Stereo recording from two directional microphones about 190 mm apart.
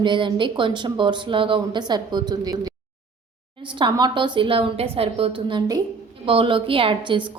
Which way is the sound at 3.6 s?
25° right (ahead or behind).